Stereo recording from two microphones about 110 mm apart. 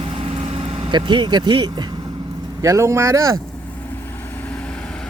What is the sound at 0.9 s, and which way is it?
Speech, 45° right (ahead or behind).